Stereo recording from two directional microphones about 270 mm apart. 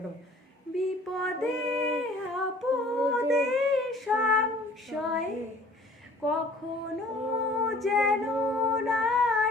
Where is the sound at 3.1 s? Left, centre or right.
Centre.